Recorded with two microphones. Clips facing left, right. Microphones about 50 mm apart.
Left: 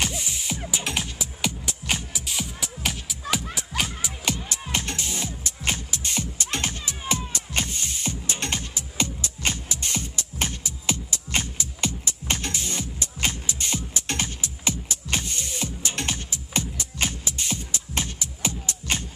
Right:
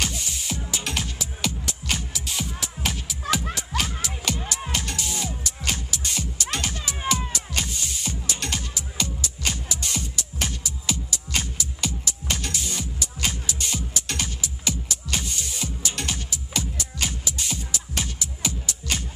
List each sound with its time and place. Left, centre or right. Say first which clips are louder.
0.0 s music: left 1 dB; centre
2.2 s music: right 1 dB; centre
3.7 s music: even; centre
4.7 s music: left 3 dB; left